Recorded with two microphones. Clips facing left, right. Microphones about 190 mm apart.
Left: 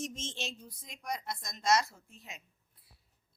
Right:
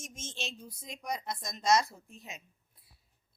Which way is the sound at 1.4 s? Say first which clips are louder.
Right 2 dB; 25° right (ahead or behind).